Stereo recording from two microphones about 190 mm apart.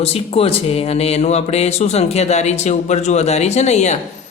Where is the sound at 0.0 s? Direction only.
30° left (ahead or behind).